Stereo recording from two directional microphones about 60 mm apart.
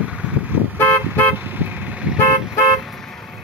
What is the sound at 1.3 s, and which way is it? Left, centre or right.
Car, right.